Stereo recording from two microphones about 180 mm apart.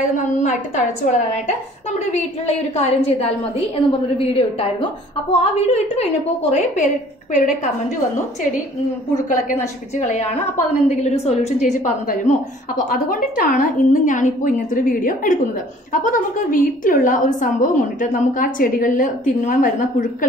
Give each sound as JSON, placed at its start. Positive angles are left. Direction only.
{"t": 0.0, "sound": "a woman's voice", "side_deg": 45}
{"t": 9.3, "sound": "a woman's voice", "side_deg": 40}